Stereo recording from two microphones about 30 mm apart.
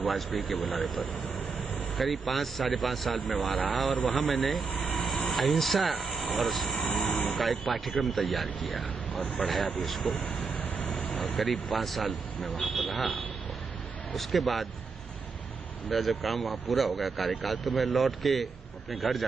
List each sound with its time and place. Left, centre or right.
0.0 s speech: centre
6.8 s vehicle: centre
7.3 s speech: centre
10.4 s vehicle: left
11.1 s speech: centre
14.1 s speech: centre
15.9 s speech: centre